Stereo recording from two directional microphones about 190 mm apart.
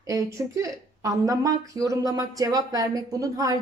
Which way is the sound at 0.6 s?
15° right (ahead or behind).